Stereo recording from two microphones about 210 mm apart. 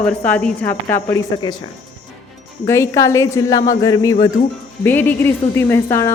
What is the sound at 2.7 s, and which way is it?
Speech, 15° left (ahead or behind).